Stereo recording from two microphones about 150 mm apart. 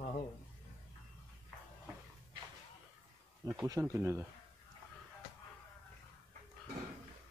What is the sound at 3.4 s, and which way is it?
Speech, 25° right (ahead or behind).